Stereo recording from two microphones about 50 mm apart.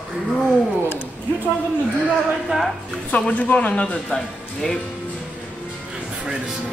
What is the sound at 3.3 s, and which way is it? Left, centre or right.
Speech, left.